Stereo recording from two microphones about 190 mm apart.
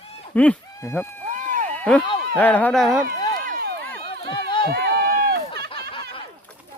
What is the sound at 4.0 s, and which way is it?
Run, 25° left (ahead or behind).